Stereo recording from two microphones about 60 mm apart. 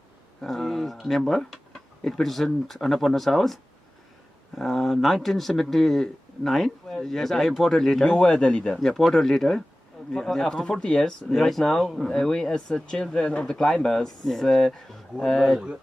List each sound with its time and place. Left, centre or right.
0.4 s speech: centre
8.1 s speech: centre
8.7 s speech: centre
11.3 s speech: centre